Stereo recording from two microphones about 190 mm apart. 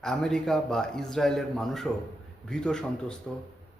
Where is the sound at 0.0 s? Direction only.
5° left (ahead or behind).